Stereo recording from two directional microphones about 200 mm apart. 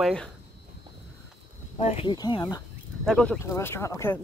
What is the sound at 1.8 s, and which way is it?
Speech, 30° left (ahead or behind).